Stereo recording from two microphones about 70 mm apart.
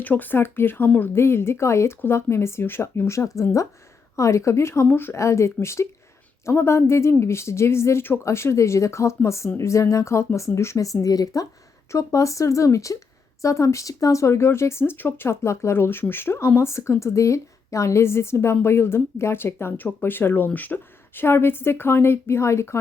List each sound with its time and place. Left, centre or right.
0.0 s speech: left
11.9 s speech: left